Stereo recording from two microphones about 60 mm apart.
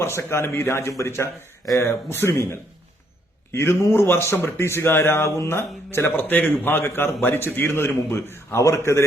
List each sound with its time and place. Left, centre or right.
0.0 s a man's voice: left
6.2 s a man's voice: left
8.6 s a man's voice: left